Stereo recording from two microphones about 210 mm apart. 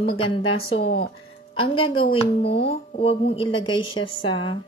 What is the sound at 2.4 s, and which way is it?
Speech, 50° left (ahead or behind).